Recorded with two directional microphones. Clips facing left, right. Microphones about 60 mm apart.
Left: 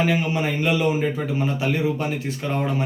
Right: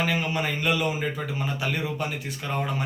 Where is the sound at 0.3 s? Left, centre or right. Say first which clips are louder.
Left 4 dB; left.